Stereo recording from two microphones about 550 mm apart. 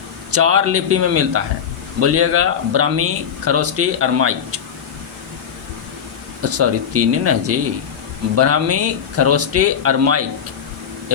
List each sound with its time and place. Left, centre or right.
0.3 s speech: right
6.4 s speech: right